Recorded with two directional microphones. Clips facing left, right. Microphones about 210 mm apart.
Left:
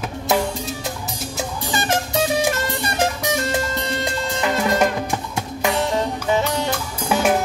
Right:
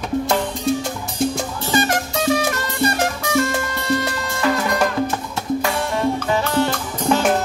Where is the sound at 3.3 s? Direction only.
20° left (ahead or behind).